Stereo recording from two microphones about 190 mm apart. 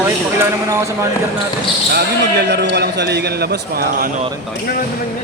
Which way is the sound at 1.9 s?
60° right (ahead or behind).